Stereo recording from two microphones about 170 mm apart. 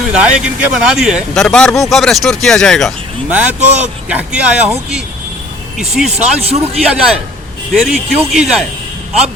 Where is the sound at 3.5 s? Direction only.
40° right (ahead or behind).